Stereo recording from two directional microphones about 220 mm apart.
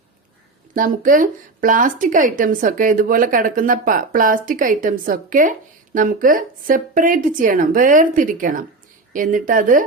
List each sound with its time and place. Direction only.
0.7 s speech: 40° right (ahead or behind)